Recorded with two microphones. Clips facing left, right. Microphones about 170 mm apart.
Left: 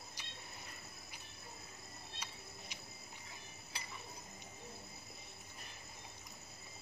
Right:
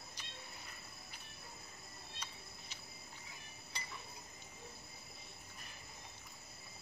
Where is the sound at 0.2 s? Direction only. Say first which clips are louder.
Even; 10° left (ahead or behind).